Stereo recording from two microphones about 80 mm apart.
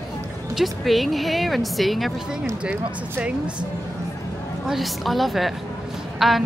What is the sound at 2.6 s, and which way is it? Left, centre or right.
Speech, centre.